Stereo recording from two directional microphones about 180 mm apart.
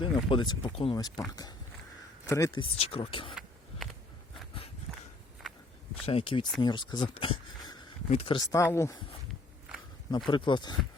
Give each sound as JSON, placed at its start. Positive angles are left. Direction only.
{"t": 0.0, "sound": "speech", "side_deg": 25}
{"t": 4.9, "sound": "a sound", "side_deg": 0}
{"t": 6.1, "sound": "speech", "side_deg": 30}
{"t": 10.1, "sound": "speech", "side_deg": 25}